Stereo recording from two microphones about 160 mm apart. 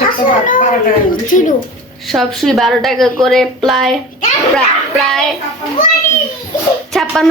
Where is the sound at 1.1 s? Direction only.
55° left (ahead or behind).